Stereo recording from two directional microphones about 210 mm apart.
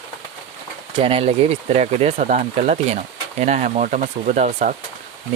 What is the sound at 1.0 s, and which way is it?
Speech, 25° right (ahead or behind).